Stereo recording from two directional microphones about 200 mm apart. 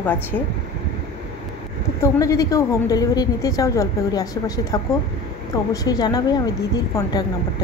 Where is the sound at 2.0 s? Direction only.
15° left (ahead or behind).